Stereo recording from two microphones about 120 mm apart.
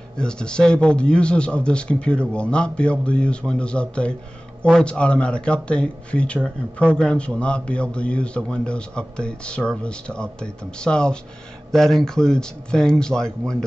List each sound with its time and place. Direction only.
0.2 s a man's voice: 5° left (ahead or behind)